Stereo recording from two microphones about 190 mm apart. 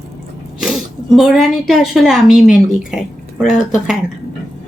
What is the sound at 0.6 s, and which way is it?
Speech, centre (ahead or behind).